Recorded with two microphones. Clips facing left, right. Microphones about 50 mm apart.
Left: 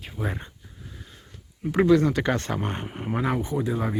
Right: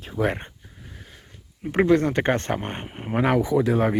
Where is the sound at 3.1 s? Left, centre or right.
Right.